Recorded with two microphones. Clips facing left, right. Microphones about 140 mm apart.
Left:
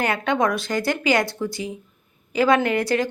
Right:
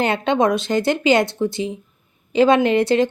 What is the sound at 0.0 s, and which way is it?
Speech, 25° right (ahead or behind).